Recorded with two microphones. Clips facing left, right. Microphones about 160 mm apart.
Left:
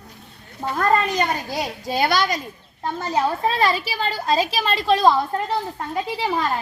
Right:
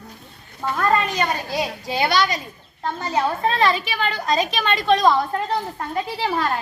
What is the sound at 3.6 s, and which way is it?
A woman's voice, 35° left (ahead or behind).